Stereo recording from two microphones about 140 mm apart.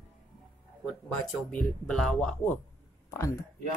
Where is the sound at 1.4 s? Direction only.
5° left (ahead or behind).